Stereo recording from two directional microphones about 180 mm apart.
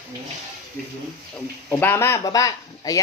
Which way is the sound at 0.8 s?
60° right (ahead or behind).